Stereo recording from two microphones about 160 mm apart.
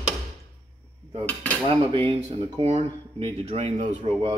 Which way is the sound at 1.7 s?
35° right (ahead or behind).